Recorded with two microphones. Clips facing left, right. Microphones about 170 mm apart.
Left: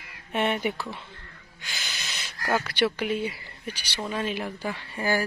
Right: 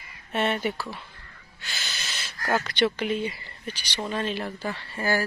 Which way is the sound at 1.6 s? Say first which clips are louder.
Right 1 dB; 10° left (ahead or behind).